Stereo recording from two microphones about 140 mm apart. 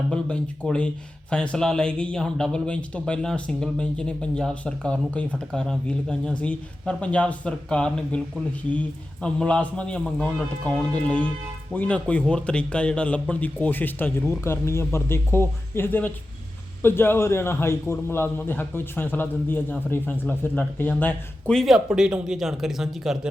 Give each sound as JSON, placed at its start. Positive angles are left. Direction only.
{"t": 0.1, "sound": "a man's voice", "side_deg": 10}